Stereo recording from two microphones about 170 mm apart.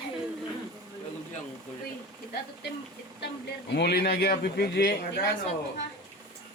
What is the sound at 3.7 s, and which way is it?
Speech, 70° left (ahead or behind).